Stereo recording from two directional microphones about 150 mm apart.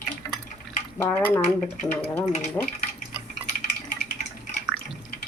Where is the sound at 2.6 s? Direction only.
10° left (ahead or behind).